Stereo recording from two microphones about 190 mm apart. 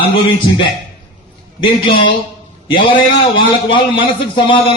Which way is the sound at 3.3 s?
25° left (ahead or behind).